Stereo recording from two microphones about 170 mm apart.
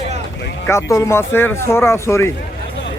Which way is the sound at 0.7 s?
15° left (ahead or behind).